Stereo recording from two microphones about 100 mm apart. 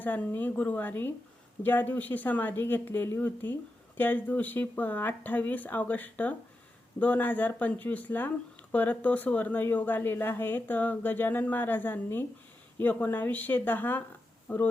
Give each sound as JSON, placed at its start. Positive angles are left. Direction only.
{"t": 0.0, "sound": "speech", "side_deg": 15}